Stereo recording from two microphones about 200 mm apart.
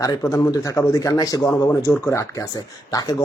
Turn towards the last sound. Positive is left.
turn(degrees=20)  # may be behind; listen again after turning